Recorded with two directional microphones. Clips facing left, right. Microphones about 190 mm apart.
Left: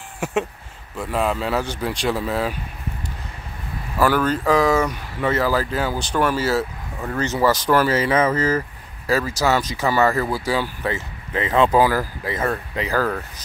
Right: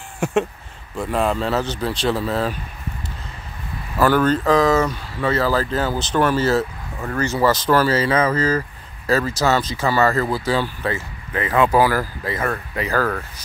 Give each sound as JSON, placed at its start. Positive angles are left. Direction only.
{"t": 0.2, "sound": "a sound", "side_deg": 5}
{"t": 0.9, "sound": "speech", "side_deg": 5}
{"t": 4.0, "sound": "speech", "side_deg": 10}